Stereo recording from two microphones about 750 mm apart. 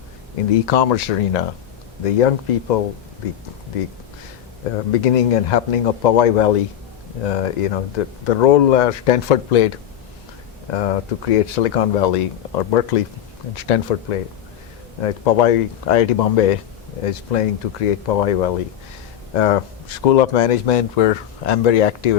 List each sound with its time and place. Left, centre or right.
0.6 s speech: left
4.9 s speech: left